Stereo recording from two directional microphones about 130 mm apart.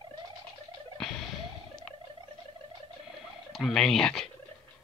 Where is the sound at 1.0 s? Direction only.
Centre (ahead or behind).